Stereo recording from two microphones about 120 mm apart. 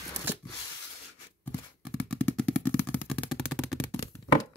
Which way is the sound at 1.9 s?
10° left (ahead or behind).